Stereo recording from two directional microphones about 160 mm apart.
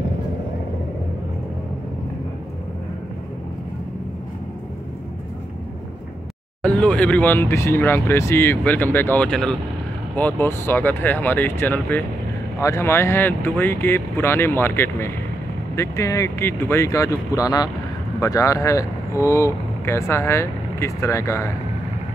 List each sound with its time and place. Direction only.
6.6 s speech: 10° left (ahead or behind)